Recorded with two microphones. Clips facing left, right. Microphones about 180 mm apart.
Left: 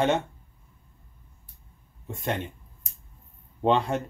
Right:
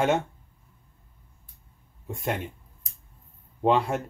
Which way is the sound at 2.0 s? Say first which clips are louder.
Even; centre (ahead or behind).